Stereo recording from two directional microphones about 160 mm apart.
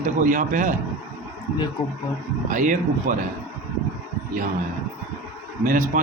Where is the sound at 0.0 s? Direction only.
55° right (ahead or behind).